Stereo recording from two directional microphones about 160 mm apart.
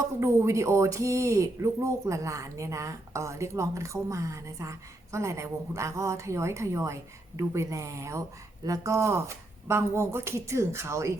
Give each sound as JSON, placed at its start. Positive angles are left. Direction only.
{"t": 0.2, "sound": "speech", "side_deg": -15}